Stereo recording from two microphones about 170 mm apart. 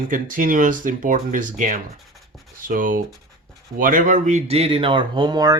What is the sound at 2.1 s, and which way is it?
Writing, centre (ahead or behind).